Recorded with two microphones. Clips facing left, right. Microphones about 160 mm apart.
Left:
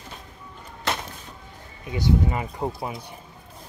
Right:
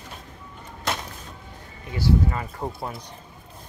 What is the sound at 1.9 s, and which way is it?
Speech, 20° left (ahead or behind).